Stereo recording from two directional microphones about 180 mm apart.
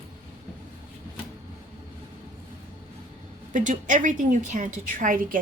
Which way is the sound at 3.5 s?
45° right (ahead or behind).